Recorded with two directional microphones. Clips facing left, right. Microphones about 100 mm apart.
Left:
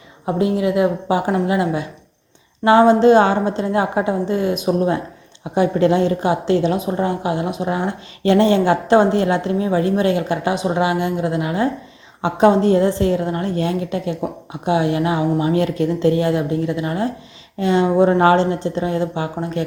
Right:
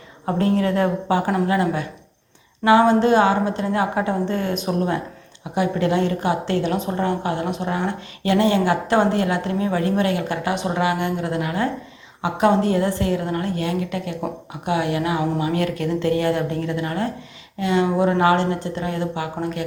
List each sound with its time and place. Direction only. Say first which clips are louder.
0.3 s a woman's voice: left 2 dB; 15° left (ahead or behind); by 18.3 s 35° left (ahead or behind)
18.3 s a woman's voice: left 4 dB; 20° left (ahead or behind)